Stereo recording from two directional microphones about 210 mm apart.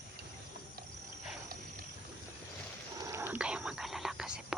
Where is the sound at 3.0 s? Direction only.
15° right (ahead or behind).